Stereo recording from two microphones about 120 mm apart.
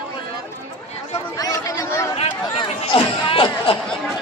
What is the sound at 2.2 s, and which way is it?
Chatter, 45° left (ahead or behind).